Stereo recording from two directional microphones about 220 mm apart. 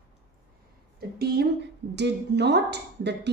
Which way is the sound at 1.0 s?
45° right (ahead or behind).